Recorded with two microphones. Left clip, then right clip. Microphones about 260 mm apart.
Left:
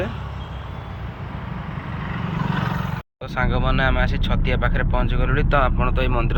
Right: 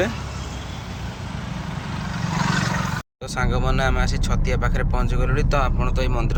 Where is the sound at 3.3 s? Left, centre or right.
Centre.